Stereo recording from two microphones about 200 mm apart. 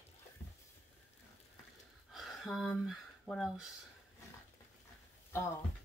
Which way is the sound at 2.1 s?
Centre (ahead or behind).